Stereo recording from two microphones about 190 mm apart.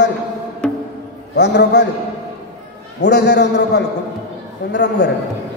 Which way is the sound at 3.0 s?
65° left (ahead or behind).